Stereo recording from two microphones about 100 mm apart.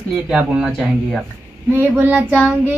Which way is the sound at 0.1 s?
10° right (ahead or behind).